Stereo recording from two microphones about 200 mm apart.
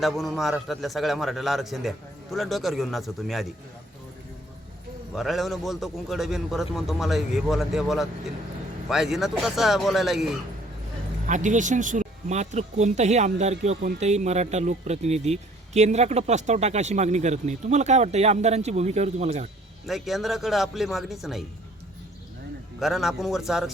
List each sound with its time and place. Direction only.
0.0 s a man's voice: centre (ahead or behind)
5.1 s a man's voice: centre (ahead or behind)
11.3 s speech: 40° right (ahead or behind)
19.9 s a man's voice: centre (ahead or behind)
22.8 s a man's voice: centre (ahead or behind)